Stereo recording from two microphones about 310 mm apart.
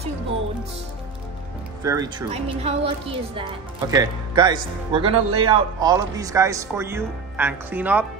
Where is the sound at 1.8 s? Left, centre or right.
Centre.